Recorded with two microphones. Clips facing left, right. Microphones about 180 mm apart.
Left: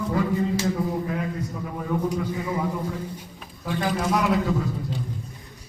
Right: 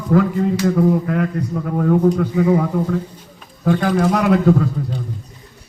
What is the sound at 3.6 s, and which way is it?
A man's voice, 65° right (ahead or behind).